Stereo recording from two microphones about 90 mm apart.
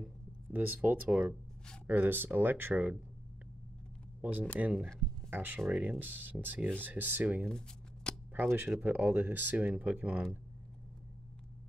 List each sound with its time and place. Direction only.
0.5 s speech: 20° right (ahead or behind)
4.2 s speech: 20° right (ahead or behind)
7.4 s shuffling cards: 10° left (ahead or behind)
8.4 s speech: 20° right (ahead or behind)